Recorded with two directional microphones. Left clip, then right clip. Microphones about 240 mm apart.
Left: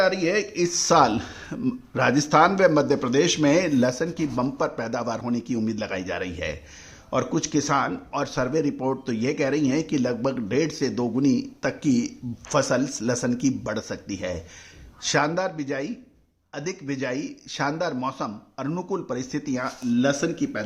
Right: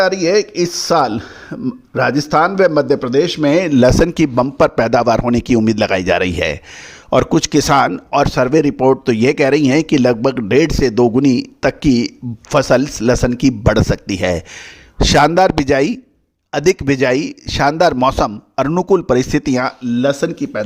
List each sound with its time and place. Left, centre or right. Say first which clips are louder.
0.0 s a man's voice: right 9 dB; right